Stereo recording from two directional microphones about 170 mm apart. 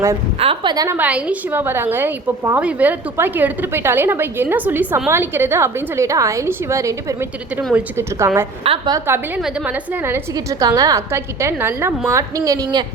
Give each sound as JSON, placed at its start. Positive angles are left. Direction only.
{"t": 0.3, "sound": "a woman's voice", "side_deg": -30}
{"t": 0.9, "sound": "a woman's voice", "side_deg": -10}
{"t": 8.6, "sound": "a woman's voice", "side_deg": -30}
{"t": 9.0, "sound": "a woman's voice", "side_deg": -15}